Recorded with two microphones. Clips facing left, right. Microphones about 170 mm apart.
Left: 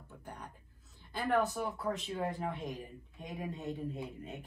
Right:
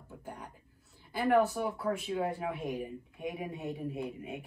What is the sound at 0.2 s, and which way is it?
Speech, 5° right (ahead or behind).